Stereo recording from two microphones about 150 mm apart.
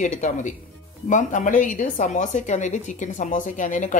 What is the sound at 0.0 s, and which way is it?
Speech, 55° left (ahead or behind).